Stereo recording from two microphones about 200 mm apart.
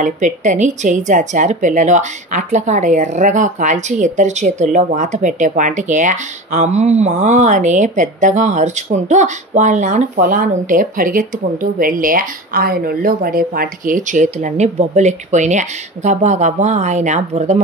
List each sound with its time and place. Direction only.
0.0 s speech: 40° right (ahead or behind)